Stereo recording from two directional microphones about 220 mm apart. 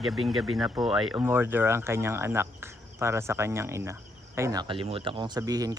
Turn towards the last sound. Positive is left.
turn(degrees=-15)  # may be behind; listen again after turning